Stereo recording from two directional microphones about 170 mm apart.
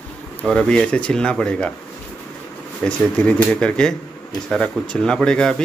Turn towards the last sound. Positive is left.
turn(degrees=5)  # may be behind; listen again after turning